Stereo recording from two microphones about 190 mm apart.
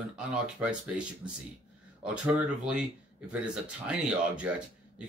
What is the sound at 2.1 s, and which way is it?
Speech, 5° right (ahead or behind).